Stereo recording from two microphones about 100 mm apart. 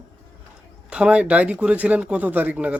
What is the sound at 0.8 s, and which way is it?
Speech, 10° right (ahead or behind).